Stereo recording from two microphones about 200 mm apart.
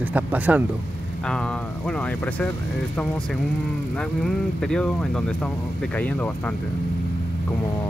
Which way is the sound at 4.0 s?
5° left (ahead or behind).